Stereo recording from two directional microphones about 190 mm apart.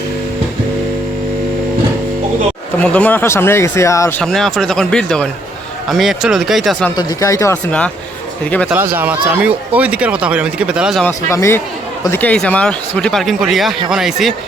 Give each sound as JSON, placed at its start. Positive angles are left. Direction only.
{"t": 2.7, "sound": "speech", "side_deg": 5}
{"t": 4.2, "sound": "speech", "side_deg": 0}
{"t": 6.9, "sound": "speech", "side_deg": 15}
{"t": 8.7, "sound": "speech", "side_deg": -10}
{"t": 11.0, "sound": "speech", "side_deg": 15}